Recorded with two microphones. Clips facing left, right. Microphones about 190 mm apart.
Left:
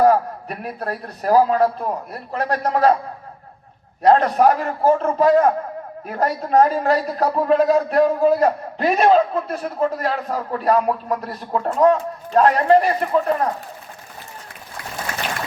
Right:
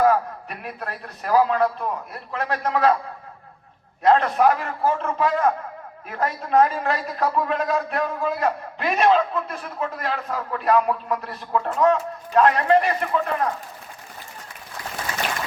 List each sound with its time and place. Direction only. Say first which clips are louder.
0.0 s a man's voice: left 4 dB; 40° left (ahead or behind)
4.0 s a man's voice: left 3 dB; 40° left (ahead or behind)